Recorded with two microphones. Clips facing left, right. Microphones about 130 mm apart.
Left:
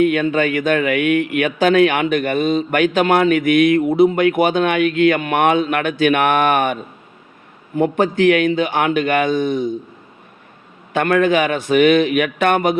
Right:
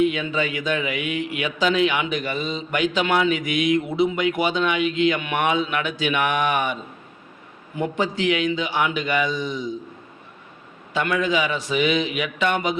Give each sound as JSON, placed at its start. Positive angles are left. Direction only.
{"t": 0.0, "sound": "a man's voice", "side_deg": 55}
{"t": 7.8, "sound": "a man's voice", "side_deg": 50}
{"t": 10.9, "sound": "a man's voice", "side_deg": 55}